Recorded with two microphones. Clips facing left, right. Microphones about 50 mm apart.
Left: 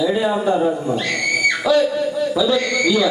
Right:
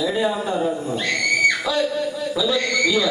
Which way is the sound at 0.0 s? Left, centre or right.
Centre.